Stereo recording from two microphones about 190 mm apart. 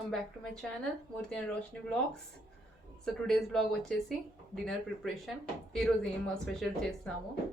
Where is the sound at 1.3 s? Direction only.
5° left (ahead or behind).